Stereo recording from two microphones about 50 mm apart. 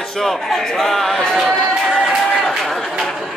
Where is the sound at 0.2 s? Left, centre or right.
Centre.